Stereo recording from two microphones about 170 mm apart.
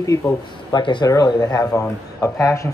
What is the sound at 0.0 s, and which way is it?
Speech, 20° left (ahead or behind).